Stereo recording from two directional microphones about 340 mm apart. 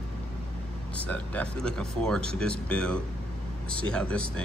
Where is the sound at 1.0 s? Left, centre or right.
Centre.